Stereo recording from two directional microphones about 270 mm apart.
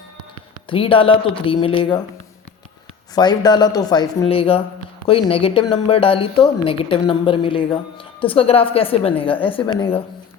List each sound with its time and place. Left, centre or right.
0.7 s a woman's voice: centre
3.2 s a woman's voice: centre